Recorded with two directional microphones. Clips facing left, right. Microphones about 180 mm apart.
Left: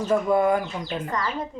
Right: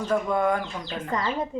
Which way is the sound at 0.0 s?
5° left (ahead or behind).